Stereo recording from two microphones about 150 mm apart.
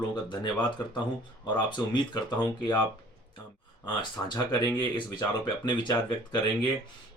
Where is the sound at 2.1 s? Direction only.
30° left (ahead or behind).